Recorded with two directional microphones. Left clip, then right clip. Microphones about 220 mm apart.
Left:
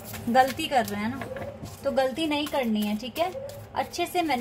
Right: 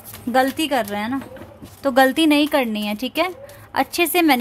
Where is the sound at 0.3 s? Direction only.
50° right (ahead or behind).